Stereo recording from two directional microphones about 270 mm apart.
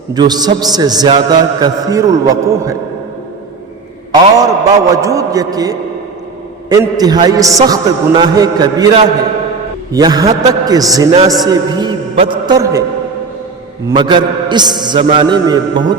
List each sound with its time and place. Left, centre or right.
0.1 s a man's voice: centre
4.1 s a man's voice: centre
13.9 s a man's voice: centre